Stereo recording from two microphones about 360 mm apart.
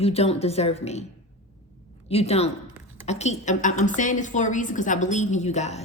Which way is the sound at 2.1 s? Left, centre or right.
Centre.